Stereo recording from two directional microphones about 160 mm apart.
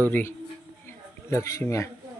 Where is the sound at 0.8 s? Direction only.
20° left (ahead or behind).